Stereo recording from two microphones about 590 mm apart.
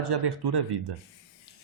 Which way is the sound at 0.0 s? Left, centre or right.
Right.